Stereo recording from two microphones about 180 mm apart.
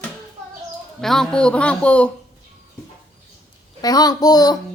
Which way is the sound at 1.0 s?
5° left (ahead or behind).